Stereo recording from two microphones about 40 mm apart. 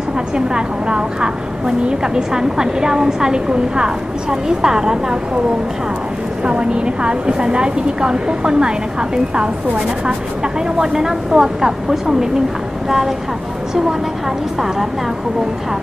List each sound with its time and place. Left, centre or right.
0.6 s a woman's voice: right
6.4 s a woman's voice: right
10.8 s a woman's voice: centre